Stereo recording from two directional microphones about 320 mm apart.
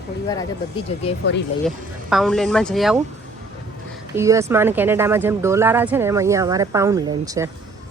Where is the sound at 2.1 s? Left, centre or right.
Centre.